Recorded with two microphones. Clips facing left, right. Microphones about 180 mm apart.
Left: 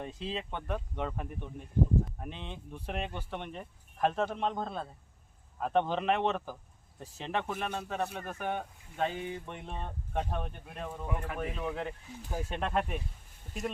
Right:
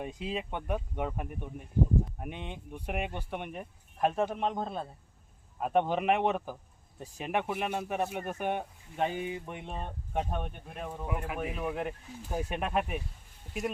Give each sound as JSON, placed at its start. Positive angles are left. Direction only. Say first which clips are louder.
{"t": 0.0, "sound": "speech", "louder": "right 2 dB", "side_deg": -10}